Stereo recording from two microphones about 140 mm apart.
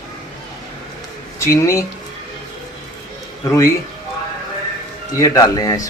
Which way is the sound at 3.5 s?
20° left (ahead or behind).